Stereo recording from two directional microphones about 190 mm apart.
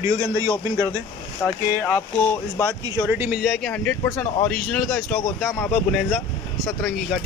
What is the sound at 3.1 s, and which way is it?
Speech, 10° right (ahead or behind).